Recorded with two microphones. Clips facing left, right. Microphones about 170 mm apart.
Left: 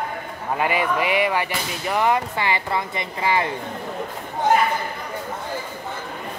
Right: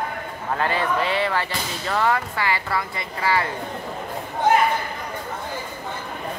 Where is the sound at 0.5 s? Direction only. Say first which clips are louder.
Left 1 dB; 15° left (ahead or behind).